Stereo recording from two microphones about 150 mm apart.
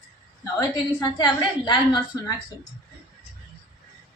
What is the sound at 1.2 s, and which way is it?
A woman's voice, 30° left (ahead or behind).